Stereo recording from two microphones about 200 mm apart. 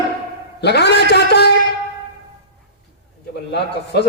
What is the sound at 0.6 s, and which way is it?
Speech, 55° left (ahead or behind).